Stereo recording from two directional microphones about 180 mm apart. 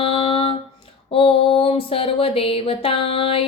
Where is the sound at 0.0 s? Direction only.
30° left (ahead or behind).